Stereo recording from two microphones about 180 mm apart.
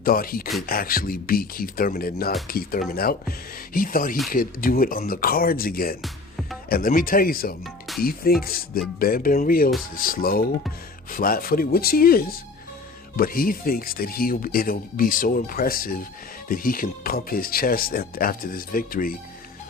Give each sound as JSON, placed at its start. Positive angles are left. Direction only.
{"t": 0.0, "sound": "speech", "side_deg": 55}
{"t": 6.0, "sound": "music", "side_deg": 0}
{"t": 6.7, "sound": "speech", "side_deg": 55}